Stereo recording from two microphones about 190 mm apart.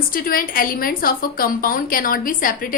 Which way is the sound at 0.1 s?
50° left (ahead or behind).